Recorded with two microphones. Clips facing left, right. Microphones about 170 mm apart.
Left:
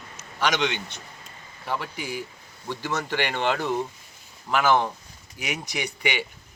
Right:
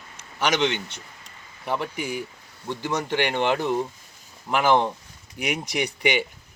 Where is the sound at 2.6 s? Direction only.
15° right (ahead or behind).